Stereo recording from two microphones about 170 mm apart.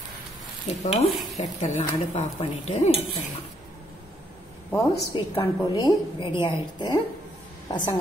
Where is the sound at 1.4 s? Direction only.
40° left (ahead or behind).